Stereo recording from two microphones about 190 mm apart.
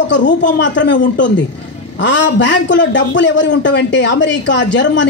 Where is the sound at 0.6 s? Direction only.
70° left (ahead or behind).